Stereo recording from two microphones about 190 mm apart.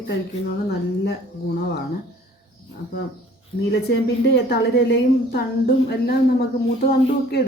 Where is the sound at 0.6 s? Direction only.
60° left (ahead or behind).